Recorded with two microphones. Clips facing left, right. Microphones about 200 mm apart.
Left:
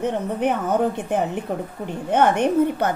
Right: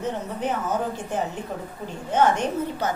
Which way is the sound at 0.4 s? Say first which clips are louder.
Left 6 dB; 60° left (ahead or behind).